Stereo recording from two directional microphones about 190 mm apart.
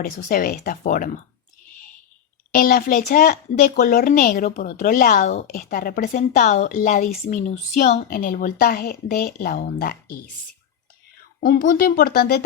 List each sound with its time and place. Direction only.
0.0 s speech: 50° left (ahead or behind)
2.5 s speech: 50° left (ahead or behind)
11.3 s speech: 50° left (ahead or behind)